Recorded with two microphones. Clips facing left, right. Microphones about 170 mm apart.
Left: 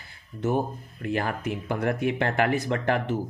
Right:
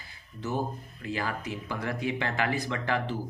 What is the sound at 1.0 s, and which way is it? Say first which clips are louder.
Speech: left 5 dB; 55° left (ahead or behind).